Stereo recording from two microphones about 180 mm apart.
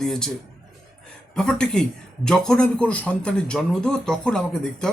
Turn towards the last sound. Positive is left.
turn(degrees=5)  # may be behind; listen again after turning